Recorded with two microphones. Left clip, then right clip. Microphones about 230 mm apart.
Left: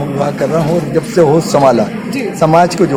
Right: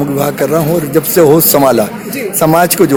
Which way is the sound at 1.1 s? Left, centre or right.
Right.